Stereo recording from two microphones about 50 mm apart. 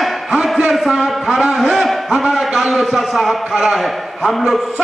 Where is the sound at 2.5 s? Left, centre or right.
Centre.